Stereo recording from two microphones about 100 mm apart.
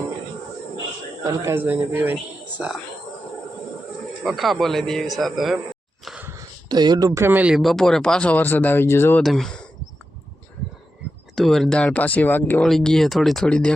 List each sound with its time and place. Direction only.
1.5 s speech: 20° right (ahead or behind)
2.6 s speech: 5° right (ahead or behind)
4.2 s speech: centre (ahead or behind)
6.3 s a sound: 45° right (ahead or behind)
7.1 s speech: 25° right (ahead or behind)
7.5 s speech: centre (ahead or behind); by 9.2 s 25° left (ahead or behind)
9.2 s speech: 5° left (ahead or behind)
11.3 s speech: 5° left (ahead or behind); by 12.6 s 20° left (ahead or behind)
12.6 s speech: 5° left (ahead or behind)